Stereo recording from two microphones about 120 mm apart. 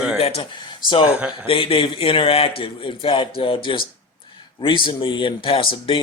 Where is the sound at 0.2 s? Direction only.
55° left (ahead or behind).